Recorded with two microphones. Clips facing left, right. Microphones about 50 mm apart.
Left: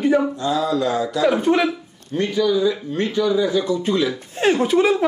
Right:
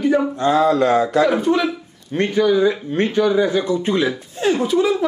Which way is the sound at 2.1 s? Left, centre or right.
Right.